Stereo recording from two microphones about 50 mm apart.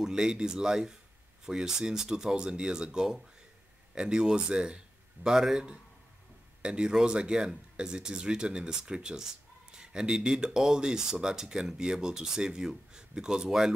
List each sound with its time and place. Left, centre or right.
0.0 s speech: centre